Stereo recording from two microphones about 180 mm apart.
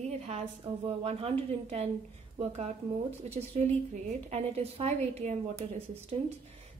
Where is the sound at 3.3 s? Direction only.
35° right (ahead or behind).